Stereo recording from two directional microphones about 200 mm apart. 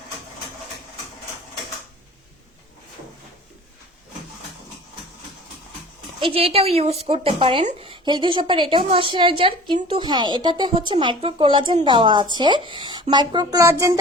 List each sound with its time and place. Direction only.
6.1 s speech: 25° right (ahead or behind)